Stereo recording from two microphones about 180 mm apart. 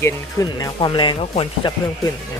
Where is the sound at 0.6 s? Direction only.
25° left (ahead or behind).